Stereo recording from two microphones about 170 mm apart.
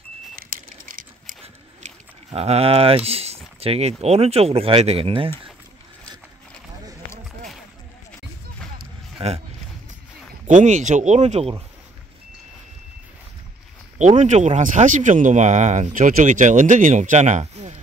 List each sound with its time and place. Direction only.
0.4 s a sound: 55° right (ahead or behind)
2.3 s speech: 35° right (ahead or behind)
9.2 s speech: 35° right (ahead or behind)
10.4 s speech: 45° right (ahead or behind)
13.9 s speech: 45° right (ahead or behind)